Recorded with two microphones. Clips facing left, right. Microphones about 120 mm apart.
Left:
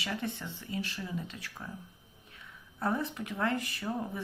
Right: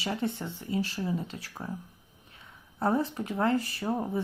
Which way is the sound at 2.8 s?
35° right (ahead or behind).